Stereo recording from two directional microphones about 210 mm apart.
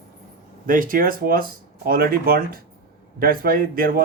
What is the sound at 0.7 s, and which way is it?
Speech, 40° right (ahead or behind).